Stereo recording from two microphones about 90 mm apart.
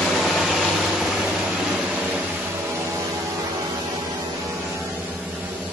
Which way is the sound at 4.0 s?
35° right (ahead or behind).